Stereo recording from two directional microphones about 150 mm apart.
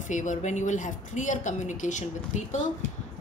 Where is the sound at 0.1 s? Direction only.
55° left (ahead or behind).